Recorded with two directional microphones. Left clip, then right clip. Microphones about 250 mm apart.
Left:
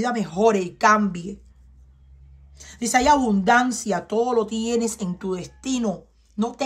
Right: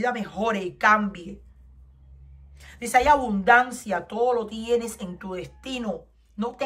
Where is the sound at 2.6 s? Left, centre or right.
Left.